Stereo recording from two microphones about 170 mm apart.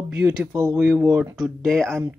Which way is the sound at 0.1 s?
5° right (ahead or behind).